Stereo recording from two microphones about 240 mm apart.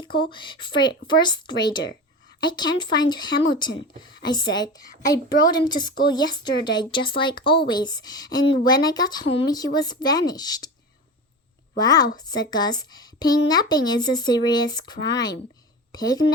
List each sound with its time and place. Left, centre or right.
0.0 s a woman's voice: centre
11.8 s a woman's voice: centre